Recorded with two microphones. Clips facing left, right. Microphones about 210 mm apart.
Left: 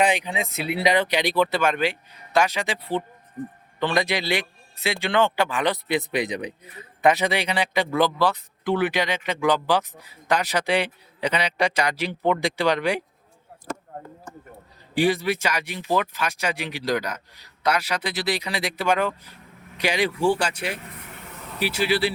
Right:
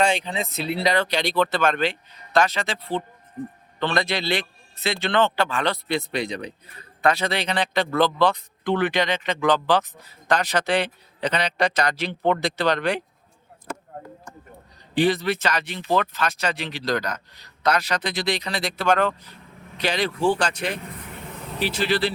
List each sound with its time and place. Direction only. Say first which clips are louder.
0.0 s a man's voice: even; 15° left (ahead or behind)
14.9 s a man's voice: right 1 dB; 10° left (ahead or behind)